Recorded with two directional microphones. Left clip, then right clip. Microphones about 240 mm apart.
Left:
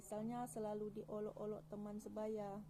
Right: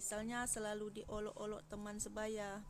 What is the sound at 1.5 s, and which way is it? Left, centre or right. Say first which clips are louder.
Speech: right 2 dB; right.